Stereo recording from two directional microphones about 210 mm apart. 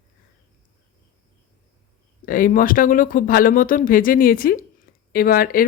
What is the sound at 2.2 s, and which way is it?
Speech, 40° left (ahead or behind).